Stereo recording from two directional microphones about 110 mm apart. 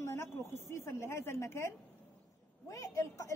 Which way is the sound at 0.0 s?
25° left (ahead or behind).